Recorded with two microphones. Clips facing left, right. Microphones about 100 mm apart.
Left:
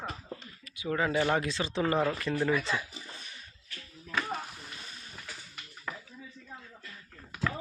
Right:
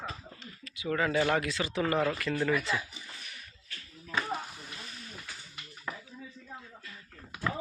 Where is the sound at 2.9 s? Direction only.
25° left (ahead or behind).